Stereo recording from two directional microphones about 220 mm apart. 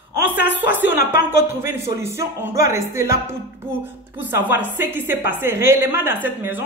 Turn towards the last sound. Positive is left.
turn(degrees=-10)  # may be behind; listen again after turning